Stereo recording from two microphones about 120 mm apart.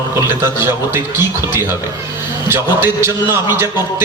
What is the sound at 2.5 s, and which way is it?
A man's voice, 20° right (ahead or behind).